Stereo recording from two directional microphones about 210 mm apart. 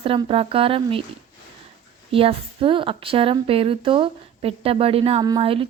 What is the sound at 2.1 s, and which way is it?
A woman's voice, 25° right (ahead or behind).